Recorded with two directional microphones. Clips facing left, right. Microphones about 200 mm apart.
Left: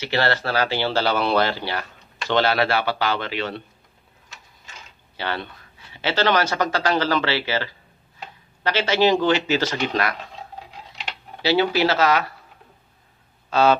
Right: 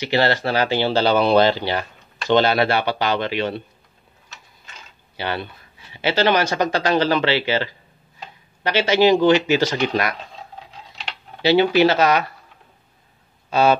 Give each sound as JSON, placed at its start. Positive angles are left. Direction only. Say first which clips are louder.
{"t": 0.0, "sound": "speech", "louder": "right 3 dB", "side_deg": -15}
{"t": 5.1, "sound": "speech", "louder": "right 2 dB", "side_deg": -15}
{"t": 11.4, "sound": "speech", "louder": "right 4 dB", "side_deg": -20}
{"t": 13.5, "sound": "speech", "louder": "right 1 dB", "side_deg": -15}